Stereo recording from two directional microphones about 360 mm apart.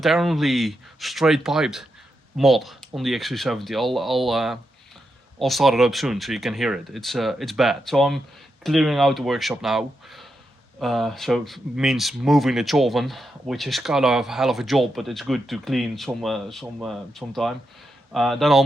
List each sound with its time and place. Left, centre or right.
0.0 s speech: centre